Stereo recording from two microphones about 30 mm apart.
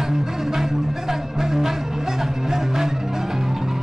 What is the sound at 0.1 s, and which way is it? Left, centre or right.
Music, centre.